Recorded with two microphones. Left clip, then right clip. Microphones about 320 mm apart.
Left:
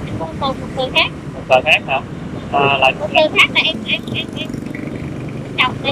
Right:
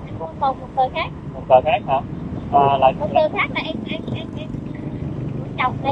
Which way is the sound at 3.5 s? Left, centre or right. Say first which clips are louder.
Left 10 dB; left.